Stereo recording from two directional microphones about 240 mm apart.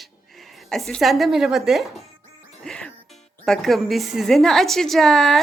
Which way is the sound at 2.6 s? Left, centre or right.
Centre.